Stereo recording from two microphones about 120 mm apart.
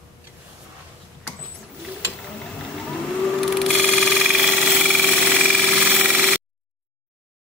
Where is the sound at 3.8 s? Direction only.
5° left (ahead or behind).